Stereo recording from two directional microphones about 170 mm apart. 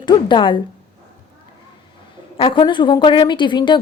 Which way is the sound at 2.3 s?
30° left (ahead or behind).